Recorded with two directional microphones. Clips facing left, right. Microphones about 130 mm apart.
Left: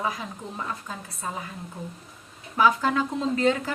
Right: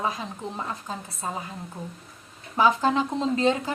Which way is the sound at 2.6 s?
25° right (ahead or behind).